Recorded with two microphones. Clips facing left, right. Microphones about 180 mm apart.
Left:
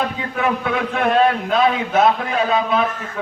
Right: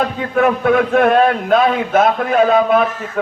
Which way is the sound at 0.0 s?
50° right (ahead or behind).